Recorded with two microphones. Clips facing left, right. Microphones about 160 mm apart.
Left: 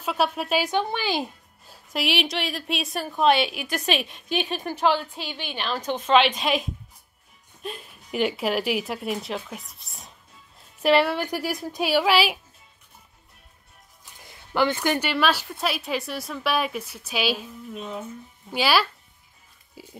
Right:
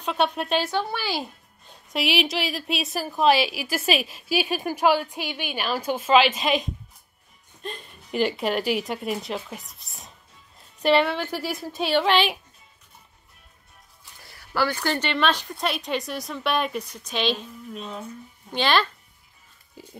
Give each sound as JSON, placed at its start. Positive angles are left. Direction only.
{"t": 0.0, "sound": "a woman's voice", "side_deg": 5}
{"t": 0.7, "sound": "a woman's voice", "side_deg": 20}
{"t": 1.7, "sound": "a woman's voice", "side_deg": 0}
{"t": 10.6, "sound": "music", "side_deg": 5}
{"t": 11.1, "sound": "a woman's voice", "side_deg": 10}
{"t": 14.2, "sound": "a woman's voice", "side_deg": 20}